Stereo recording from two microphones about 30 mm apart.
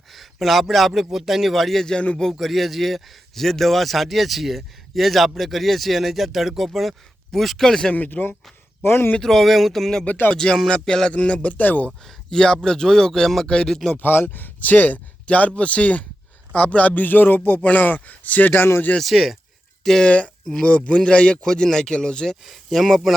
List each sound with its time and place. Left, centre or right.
0.1 s a man's voice: centre
7.9 s a man's voice: left
9.2 s speech: centre
10.3 s speech: left
11.1 s speech: left
11.5 s speech: left
12.0 s speech: centre
13.9 s speech: left
15.3 s a man's voice: left
17.7 s speech: left
19.0 s speech: centre
20.1 s speech: left
21.4 s speech: centre
22.4 s speech: centre